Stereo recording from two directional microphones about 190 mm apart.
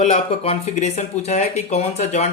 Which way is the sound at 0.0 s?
30° left (ahead or behind).